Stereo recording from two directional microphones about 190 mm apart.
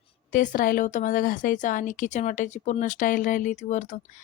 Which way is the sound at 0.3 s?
45° left (ahead or behind).